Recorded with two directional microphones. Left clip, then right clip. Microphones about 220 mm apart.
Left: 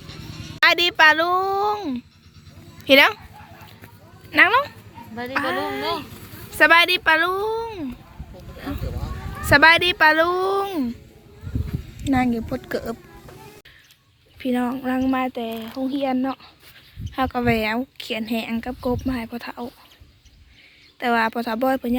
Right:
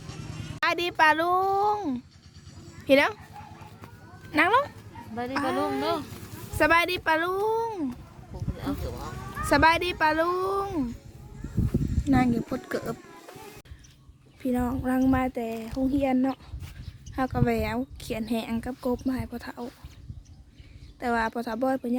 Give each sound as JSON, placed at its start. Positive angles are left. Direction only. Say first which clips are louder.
{"t": 0.0, "sound": "a sound", "louder": "left 4 dB", "side_deg": -45}
{"t": 0.6, "sound": "speech", "louder": "left 8 dB", "side_deg": 0}
{"t": 4.3, "sound": "speech", "louder": "left 6 dB", "side_deg": -10}
{"t": 9.5, "sound": "speech", "louder": "left 8 dB", "side_deg": 0}
{"t": 12.0, "sound": "speech", "louder": "left 4 dB", "side_deg": 0}
{"t": 14.3, "sound": "speech", "louder": "left 5 dB", "side_deg": 0}
{"t": 21.0, "sound": "speech", "louder": "left 7 dB", "side_deg": 0}